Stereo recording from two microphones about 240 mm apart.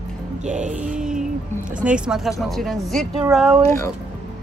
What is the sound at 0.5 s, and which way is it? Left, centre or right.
Music, right.